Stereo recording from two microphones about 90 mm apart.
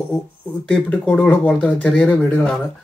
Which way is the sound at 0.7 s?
20° left (ahead or behind).